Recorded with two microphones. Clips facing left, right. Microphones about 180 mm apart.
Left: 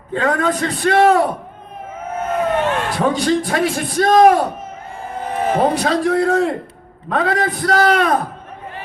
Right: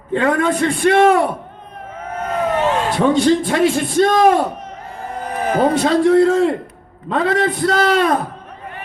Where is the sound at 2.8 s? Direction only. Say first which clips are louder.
Right 3 dB; 25° right (ahead or behind).